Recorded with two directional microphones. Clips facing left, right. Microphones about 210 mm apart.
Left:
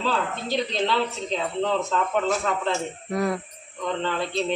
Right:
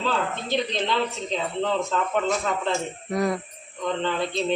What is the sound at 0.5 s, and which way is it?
Speech, centre (ahead or behind).